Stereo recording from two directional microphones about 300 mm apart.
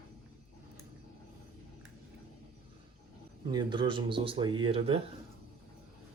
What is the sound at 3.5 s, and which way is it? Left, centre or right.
Speech, centre.